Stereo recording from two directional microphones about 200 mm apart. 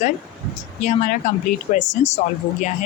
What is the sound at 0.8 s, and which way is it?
A woman's voice, 40° left (ahead or behind).